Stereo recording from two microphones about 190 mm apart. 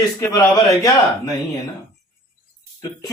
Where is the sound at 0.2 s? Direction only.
20° left (ahead or behind).